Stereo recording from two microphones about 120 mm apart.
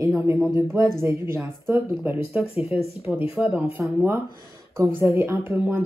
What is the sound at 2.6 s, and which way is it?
Speech, 55° left (ahead or behind).